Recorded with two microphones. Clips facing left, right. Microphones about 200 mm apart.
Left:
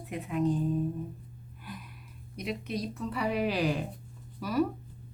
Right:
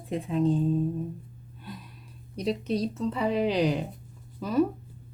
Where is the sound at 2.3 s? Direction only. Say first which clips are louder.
Right 7 dB; 35° right (ahead or behind).